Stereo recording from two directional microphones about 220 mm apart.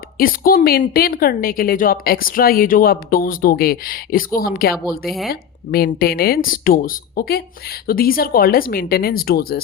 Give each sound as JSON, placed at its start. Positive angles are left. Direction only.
{"t": 0.2, "sound": "a woman's voice", "side_deg": 40}
{"t": 5.0, "sound": "speech", "side_deg": 0}
{"t": 5.3, "sound": "speech", "side_deg": 45}